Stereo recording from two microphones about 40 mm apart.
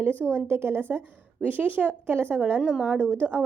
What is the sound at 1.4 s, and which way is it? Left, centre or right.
Speech, right.